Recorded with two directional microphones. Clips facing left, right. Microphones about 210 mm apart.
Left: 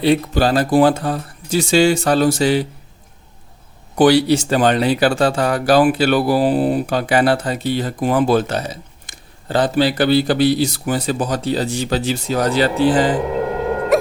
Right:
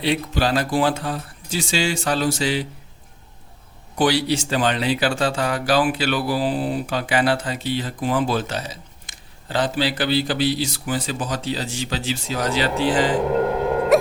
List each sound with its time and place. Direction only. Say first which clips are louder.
0.1 s speech: left 5 dB; 40° left (ahead or behind)
0.7 s speech: left 7 dB; 55° left (ahead or behind)
0.9 s speech: left 5 dB; 40° left (ahead or behind)
1.5 s speech: left 9 dB; 60° left (ahead or behind)
3.9 s speech: left 7 dB; 60° left (ahead or behind)
6.0 s speech: left 7 dB; 40° left (ahead or behind)
6.2 s speech: left 7 dB; 55° left (ahead or behind)
12.5 s speech: left 5 dB; 35° left (ahead or behind)
13.9 s dog: left 1 dB; centre (ahead or behind)